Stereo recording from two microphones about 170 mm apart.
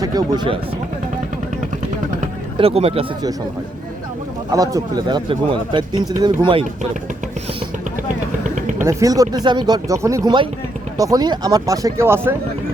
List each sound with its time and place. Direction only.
0.0 s speech: 25° right (ahead or behind)
2.6 s speech: 35° right (ahead or behind)
4.5 s speech: 20° right (ahead or behind)
8.8 s speech: 15° right (ahead or behind)